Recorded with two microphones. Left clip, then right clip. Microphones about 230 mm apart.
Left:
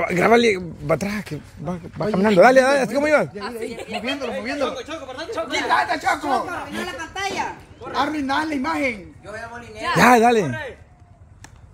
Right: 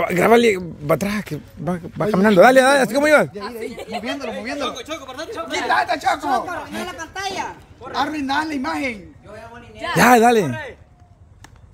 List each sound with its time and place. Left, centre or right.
0.0 s a man's voice: centre
4.6 s speech: right
5.5 s a man's voice: right
6.9 s a woman's voice: centre
7.9 s a man's voice: right
9.8 s a woman's voice: centre